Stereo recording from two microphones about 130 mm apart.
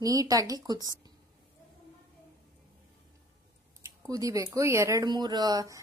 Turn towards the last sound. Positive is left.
turn(degrees=-30)  # may be behind; listen again after turning